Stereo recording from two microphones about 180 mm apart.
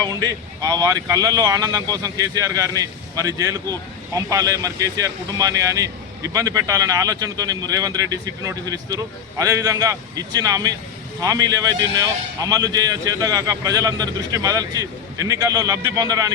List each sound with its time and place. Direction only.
0.1 s speech: 20° right (ahead or behind)